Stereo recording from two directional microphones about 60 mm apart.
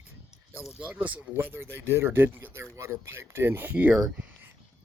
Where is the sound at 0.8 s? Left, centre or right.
Right.